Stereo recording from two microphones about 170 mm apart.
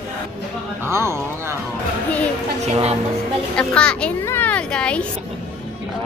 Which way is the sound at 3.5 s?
5° left (ahead or behind).